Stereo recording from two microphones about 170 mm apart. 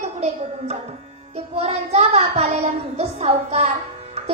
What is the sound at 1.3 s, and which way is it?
Child singing, 40° right (ahead or behind).